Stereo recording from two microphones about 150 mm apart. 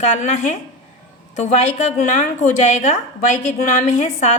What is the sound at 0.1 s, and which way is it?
Speech, 50° left (ahead or behind).